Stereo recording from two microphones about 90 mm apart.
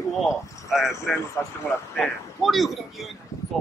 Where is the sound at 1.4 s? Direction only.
30° left (ahead or behind).